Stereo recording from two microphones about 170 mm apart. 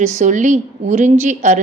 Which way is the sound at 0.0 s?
45° right (ahead or behind).